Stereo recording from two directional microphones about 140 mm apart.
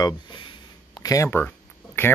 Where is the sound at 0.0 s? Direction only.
35° left (ahead or behind); by 1.5 s 20° left (ahead or behind).